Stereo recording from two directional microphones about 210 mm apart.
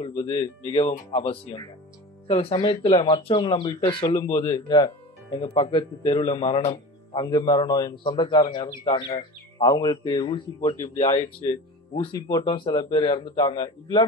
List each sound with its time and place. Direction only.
0.0 s speech: 20° left (ahead or behind)